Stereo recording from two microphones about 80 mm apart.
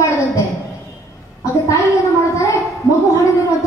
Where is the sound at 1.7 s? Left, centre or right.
Left.